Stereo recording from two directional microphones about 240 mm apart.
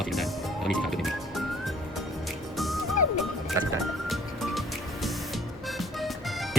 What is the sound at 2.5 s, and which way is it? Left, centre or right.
Music, centre.